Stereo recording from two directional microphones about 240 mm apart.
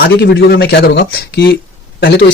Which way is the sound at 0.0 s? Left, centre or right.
Left.